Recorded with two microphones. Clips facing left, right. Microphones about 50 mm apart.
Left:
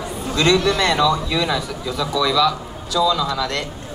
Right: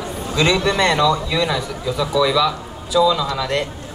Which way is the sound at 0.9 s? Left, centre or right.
Centre.